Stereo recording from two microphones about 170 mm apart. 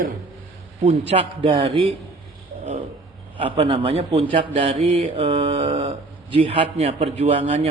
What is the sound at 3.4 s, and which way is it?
Mantra, 35° right (ahead or behind).